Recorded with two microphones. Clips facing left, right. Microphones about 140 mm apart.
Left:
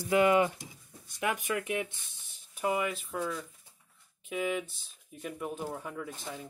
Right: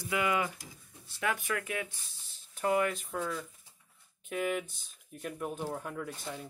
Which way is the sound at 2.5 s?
10° left (ahead or behind).